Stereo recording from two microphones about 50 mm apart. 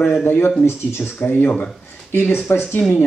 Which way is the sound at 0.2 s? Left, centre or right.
Left.